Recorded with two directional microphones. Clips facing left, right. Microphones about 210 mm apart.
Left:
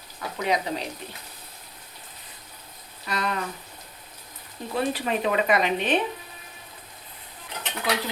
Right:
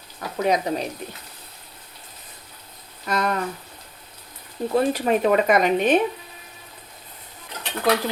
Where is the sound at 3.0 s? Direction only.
45° right (ahead or behind).